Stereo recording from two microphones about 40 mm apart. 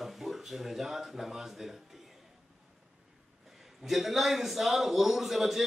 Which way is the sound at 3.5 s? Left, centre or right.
Centre.